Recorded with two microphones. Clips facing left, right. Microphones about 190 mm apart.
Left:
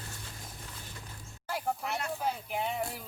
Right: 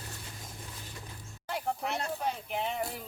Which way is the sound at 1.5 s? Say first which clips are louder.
Even; centre (ahead or behind).